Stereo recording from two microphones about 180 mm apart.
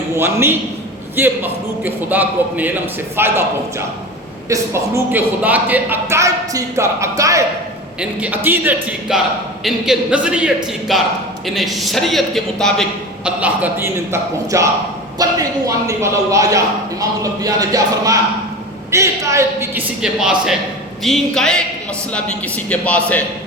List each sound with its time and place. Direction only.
0.2 s speech: 15° right (ahead or behind)
8.4 s a man's voice: 10° right (ahead or behind)
13.2 s speech: 10° right (ahead or behind)
17.0 s music: 20° right (ahead or behind)
18.9 s speech: 15° right (ahead or behind)
20.0 s a man's voice: 5° right (ahead or behind)